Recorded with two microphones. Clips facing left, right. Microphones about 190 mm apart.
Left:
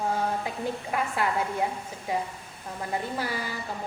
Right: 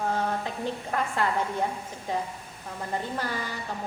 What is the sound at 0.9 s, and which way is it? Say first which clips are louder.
A woman's voice: right 1 dB; 10° left (ahead or behind).